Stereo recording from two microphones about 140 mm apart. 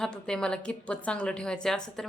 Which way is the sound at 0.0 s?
5° left (ahead or behind).